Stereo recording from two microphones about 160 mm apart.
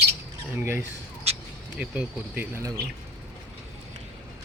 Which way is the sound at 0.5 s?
10° right (ahead or behind).